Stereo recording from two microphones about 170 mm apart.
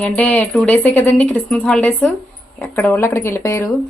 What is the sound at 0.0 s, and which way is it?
Speech, 10° left (ahead or behind).